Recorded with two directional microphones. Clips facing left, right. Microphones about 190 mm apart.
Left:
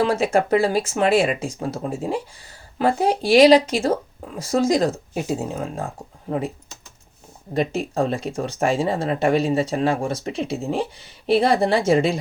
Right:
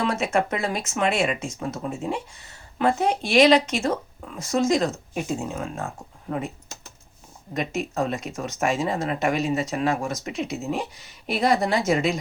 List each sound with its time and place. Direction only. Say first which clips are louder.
0.0 s speech: left 4 dB; 30° left (ahead or behind)
7.5 s speech: left 5 dB; 30° left (ahead or behind)